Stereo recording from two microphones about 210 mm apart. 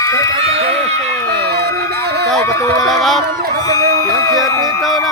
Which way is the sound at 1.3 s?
50° right (ahead or behind).